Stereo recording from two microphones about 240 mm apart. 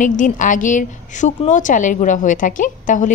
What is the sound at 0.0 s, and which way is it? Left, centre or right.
A woman's voice, left.